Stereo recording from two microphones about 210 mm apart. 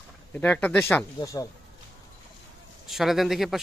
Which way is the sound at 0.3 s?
5° left (ahead or behind).